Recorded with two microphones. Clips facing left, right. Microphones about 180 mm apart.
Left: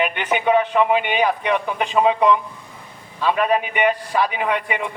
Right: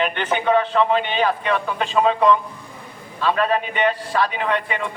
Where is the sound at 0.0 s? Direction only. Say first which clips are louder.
Left 1 dB; 10° left (ahead or behind).